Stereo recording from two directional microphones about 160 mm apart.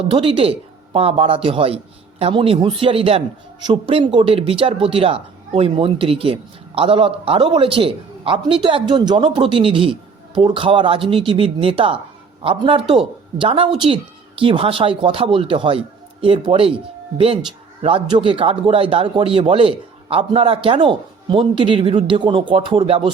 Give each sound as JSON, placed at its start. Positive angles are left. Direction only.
{"t": 0.1, "sound": "speech", "side_deg": -35}